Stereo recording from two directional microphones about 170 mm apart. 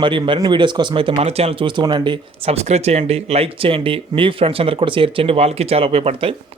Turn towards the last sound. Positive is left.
turn(degrees=-35)  # may be behind; listen again after turning